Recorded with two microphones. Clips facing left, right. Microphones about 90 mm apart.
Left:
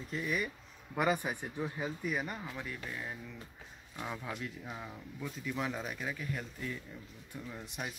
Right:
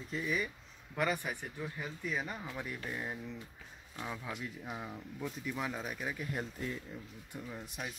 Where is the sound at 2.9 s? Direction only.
15° right (ahead or behind).